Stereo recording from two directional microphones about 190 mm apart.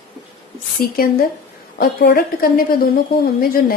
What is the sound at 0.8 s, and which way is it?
Speech, 50° left (ahead or behind).